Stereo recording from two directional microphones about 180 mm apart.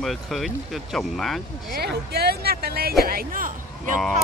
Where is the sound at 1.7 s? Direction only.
60° right (ahead or behind).